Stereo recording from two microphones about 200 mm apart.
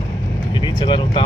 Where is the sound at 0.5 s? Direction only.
25° left (ahead or behind).